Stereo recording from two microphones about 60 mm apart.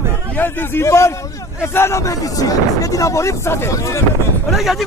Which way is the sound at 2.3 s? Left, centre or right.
Left.